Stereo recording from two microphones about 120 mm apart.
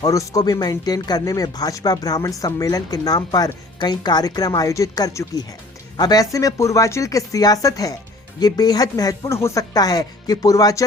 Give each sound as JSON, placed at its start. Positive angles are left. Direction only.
{"t": 0.0, "sound": "speech", "side_deg": 30}